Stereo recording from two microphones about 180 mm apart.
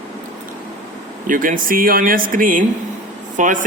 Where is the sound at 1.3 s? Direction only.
50° right (ahead or behind).